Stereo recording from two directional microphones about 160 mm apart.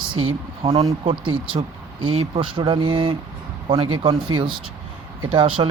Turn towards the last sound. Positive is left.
turn(degrees=-35)  # may be behind; listen again after turning